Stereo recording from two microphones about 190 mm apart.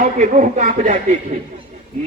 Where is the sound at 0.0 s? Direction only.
40° right (ahead or behind).